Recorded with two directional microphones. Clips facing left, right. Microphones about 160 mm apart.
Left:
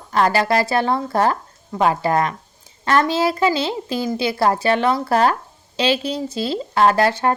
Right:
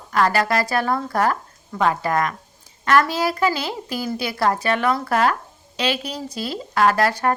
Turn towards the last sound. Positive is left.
turn(degrees=25)  # may be behind; listen again after turning